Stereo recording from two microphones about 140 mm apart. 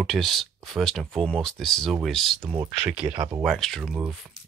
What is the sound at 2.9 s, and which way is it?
Speech, 40° right (ahead or behind).